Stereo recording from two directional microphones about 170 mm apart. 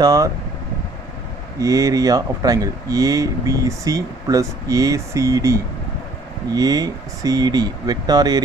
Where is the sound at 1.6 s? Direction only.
20° right (ahead or behind).